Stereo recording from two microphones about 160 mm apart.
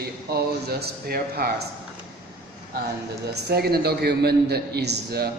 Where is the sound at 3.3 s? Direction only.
85° right.